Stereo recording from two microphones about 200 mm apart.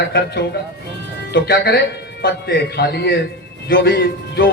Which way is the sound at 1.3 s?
55° left (ahead or behind).